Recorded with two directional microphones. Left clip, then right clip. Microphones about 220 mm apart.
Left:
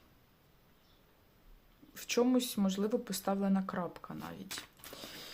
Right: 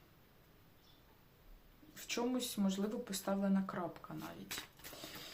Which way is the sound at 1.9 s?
45° left (ahead or behind).